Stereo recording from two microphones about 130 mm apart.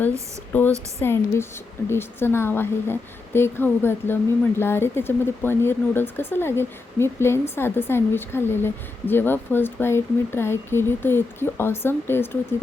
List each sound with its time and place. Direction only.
0.5 s a woman's voice: 15° left (ahead or behind)